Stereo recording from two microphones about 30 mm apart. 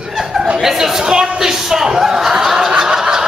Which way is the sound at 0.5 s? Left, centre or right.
Centre.